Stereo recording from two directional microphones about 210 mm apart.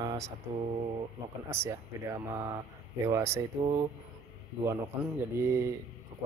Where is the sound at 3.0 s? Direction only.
10° right (ahead or behind).